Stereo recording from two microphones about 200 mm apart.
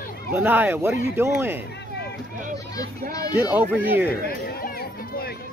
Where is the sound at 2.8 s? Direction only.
15° left (ahead or behind).